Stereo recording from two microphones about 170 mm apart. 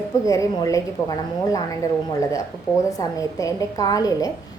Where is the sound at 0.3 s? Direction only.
20° left (ahead or behind).